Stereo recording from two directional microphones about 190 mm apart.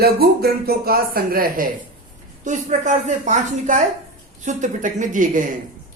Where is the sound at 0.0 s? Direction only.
55° right (ahead or behind).